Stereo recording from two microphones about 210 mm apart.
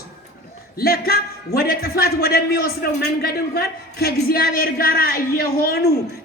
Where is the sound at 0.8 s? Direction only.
45° left (ahead or behind).